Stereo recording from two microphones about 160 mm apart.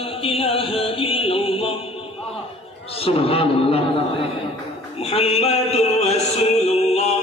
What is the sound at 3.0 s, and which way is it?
Speech, 35° left (ahead or behind).